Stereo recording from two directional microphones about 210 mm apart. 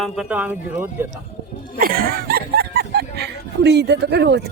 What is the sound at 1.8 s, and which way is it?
Speech, 45° right (ahead or behind).